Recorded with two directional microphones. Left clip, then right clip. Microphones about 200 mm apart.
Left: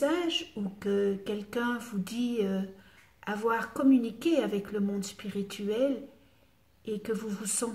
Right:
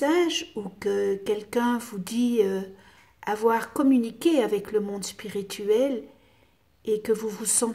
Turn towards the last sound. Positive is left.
turn(degrees=-40)  # may be behind; listen again after turning